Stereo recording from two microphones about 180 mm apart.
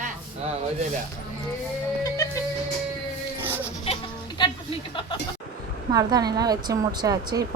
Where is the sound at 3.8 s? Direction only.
30° left (ahead or behind).